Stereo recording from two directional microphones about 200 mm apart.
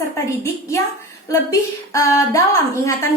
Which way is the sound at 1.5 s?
15° left (ahead or behind).